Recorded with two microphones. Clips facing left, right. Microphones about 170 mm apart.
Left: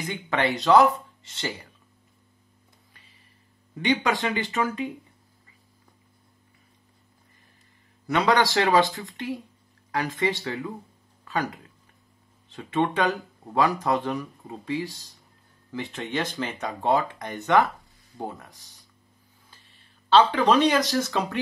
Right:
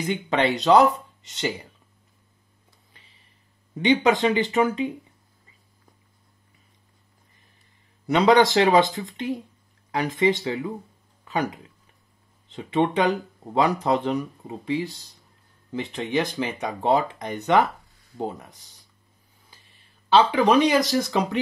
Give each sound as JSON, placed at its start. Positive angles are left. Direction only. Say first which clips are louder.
{"t": 0.1, "sound": "speech", "louder": "right 3 dB", "side_deg": -20}
{"t": 3.7, "sound": "speech", "louder": "right 5 dB", "side_deg": -20}
{"t": 8.1, "sound": "speech", "louder": "right 5 dB", "side_deg": -20}
{"t": 20.1, "sound": "speech", "louder": "right 1 dB", "side_deg": -15}